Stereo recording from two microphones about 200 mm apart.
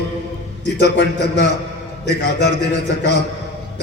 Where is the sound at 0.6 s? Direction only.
60° left (ahead or behind).